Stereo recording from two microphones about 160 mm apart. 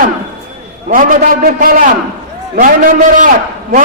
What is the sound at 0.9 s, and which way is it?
A man's voice, 55° right (ahead or behind).